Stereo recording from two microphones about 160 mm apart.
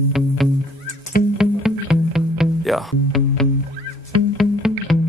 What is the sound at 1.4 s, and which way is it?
Music, 5° right (ahead or behind).